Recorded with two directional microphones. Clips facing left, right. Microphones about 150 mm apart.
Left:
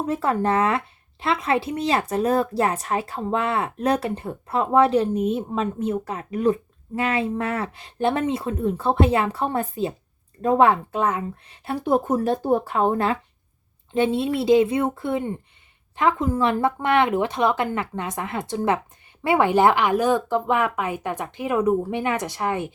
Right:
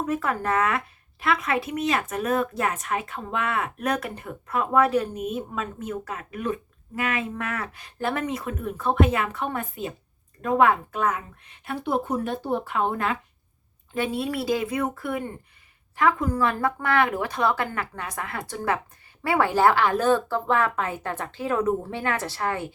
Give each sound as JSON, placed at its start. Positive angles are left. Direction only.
{"t": 0.0, "sound": "speech", "side_deg": 30}
{"t": 13.9, "sound": "speech", "side_deg": 25}